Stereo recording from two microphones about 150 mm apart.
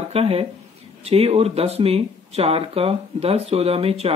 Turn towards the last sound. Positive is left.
turn(degrees=-40)  # may be behind; listen again after turning